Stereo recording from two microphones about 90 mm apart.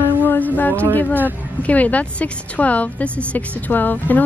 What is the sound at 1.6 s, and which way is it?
A woman's voice, 15° left (ahead or behind).